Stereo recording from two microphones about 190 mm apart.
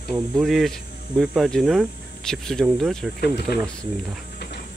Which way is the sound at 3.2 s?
60° left (ahead or behind).